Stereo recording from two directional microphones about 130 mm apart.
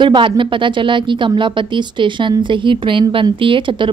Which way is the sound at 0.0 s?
40° right (ahead or behind).